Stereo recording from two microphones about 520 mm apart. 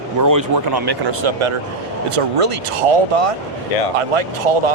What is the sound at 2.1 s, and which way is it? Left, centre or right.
Speech, right.